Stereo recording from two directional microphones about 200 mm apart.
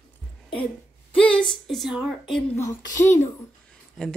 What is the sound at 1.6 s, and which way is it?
Speech, centre (ahead or behind).